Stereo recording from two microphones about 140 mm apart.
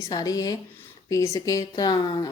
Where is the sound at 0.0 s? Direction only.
25° left (ahead or behind).